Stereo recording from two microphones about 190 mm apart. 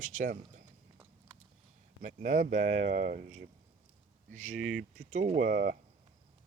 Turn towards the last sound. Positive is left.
turn(degrees=-50)  # may be behind; listen again after turning